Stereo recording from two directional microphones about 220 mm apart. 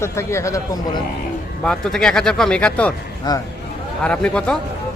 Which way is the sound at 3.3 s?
15° left (ahead or behind).